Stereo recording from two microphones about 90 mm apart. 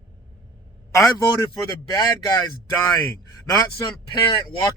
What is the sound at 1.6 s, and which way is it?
Speech, 50° left (ahead or behind).